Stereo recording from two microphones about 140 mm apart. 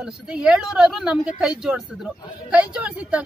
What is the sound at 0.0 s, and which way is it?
A woman's voice, 5° right (ahead or behind).